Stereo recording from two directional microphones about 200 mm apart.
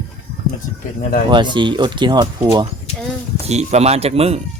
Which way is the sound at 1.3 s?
25° right (ahead or behind).